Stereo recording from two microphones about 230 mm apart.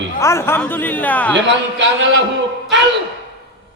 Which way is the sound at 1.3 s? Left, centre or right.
Right.